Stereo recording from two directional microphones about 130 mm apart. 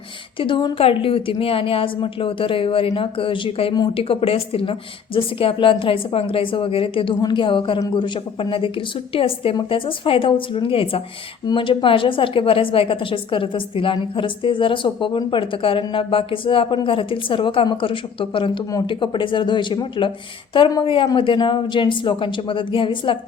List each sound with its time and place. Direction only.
0.3 s a woman's voice: 40° left (ahead or behind)